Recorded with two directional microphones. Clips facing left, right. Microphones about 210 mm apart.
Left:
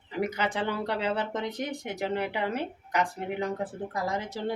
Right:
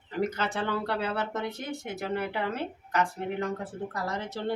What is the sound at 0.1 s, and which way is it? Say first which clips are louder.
Speech: even; 10° left (ahead or behind).